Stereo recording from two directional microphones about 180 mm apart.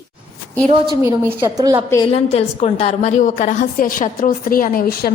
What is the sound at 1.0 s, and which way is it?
Speech, 20° right (ahead or behind).